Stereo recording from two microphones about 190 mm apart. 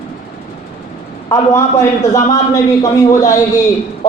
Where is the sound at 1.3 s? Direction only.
15° left (ahead or behind).